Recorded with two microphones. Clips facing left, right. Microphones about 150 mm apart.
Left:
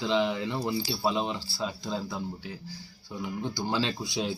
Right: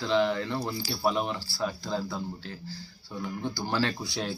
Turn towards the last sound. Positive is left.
turn(degrees=20)  # may be behind; listen again after turning